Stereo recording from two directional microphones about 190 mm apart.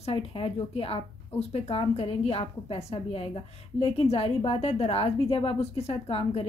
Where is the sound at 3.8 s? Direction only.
30° left (ahead or behind).